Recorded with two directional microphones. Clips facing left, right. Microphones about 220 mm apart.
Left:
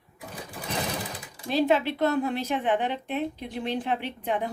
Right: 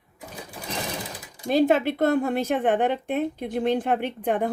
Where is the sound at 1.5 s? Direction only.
50° right (ahead or behind).